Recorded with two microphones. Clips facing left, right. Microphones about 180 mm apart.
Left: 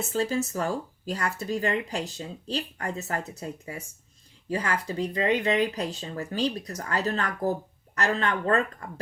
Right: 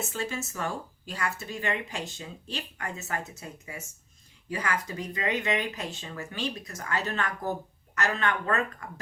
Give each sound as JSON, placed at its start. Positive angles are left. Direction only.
{"t": 0.1, "sound": "speech", "side_deg": 35}